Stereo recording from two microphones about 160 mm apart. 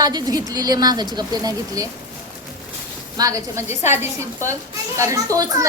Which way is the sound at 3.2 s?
20° right (ahead or behind).